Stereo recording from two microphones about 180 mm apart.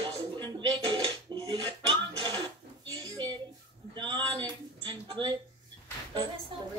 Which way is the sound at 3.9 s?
25° right (ahead or behind).